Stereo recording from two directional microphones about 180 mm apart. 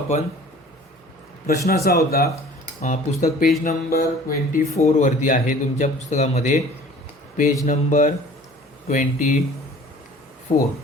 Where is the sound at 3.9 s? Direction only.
50° left (ahead or behind).